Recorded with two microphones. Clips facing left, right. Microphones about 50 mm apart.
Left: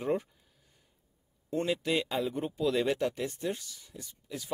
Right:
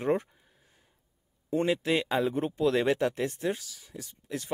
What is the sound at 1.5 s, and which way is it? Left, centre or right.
Speech, centre.